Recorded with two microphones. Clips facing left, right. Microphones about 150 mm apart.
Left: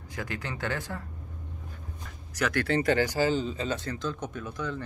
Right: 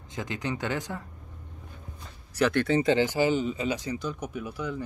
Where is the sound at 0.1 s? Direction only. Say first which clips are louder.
Right 4 dB; 20° right (ahead or behind).